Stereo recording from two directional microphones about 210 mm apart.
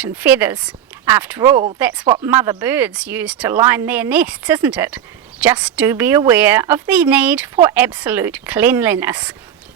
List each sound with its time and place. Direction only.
0.0 s a woman's voice: 10° right (ahead or behind)